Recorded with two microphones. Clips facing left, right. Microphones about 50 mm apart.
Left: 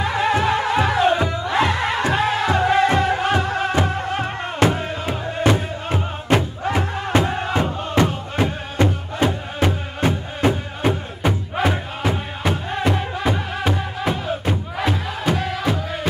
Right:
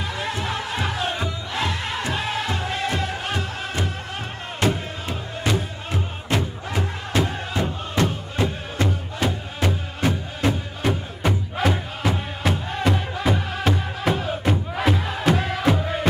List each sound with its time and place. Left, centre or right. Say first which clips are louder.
0.0 s music: left 9 dB; left; by 16.1 s centre